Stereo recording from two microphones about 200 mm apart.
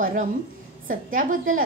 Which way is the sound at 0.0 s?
40° right (ahead or behind).